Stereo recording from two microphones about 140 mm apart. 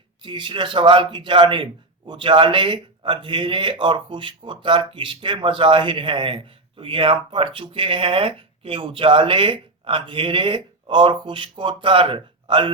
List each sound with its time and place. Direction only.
0.2 s a man's voice: 35° right (ahead or behind)